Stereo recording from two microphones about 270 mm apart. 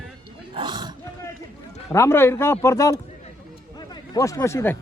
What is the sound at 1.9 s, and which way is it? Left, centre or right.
Speech, centre.